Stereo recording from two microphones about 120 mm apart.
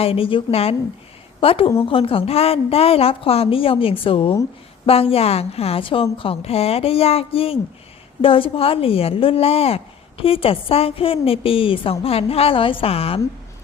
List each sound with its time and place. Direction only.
0.0 s a woman's voice: 50° left (ahead or behind)